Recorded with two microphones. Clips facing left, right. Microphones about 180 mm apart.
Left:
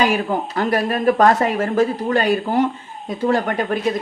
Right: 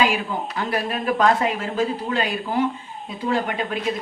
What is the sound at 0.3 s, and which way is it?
Speech, 50° left (ahead or behind).